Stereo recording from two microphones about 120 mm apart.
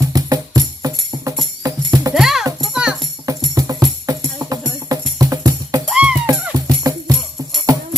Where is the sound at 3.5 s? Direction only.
30° right (ahead or behind).